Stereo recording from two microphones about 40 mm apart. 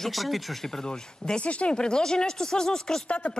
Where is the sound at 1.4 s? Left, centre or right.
Left.